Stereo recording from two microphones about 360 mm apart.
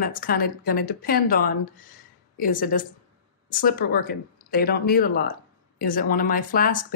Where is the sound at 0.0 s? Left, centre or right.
Left.